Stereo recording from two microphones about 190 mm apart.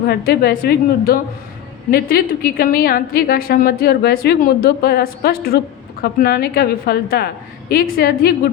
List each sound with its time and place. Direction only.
0.0 s a woman's voice: 55° left (ahead or behind)